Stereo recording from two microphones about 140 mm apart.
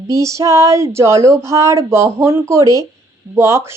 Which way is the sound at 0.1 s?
20° right (ahead or behind).